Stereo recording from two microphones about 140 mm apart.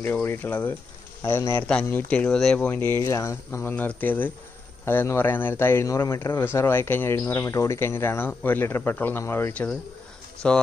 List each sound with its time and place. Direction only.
0.0 s a man's voice: 15° left (ahead or behind)